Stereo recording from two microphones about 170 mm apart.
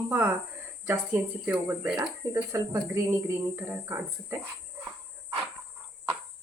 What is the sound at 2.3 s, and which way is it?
Speech, 15° right (ahead or behind).